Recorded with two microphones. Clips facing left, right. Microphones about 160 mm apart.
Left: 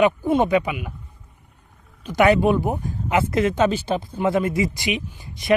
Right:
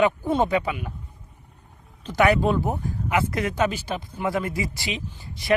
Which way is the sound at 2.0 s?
15° left (ahead or behind).